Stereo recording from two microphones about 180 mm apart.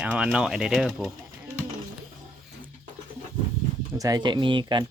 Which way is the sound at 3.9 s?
20° right (ahead or behind).